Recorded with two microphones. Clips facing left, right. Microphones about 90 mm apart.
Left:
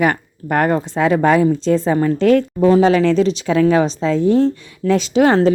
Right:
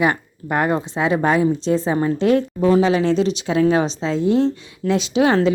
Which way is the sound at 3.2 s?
35° left (ahead or behind).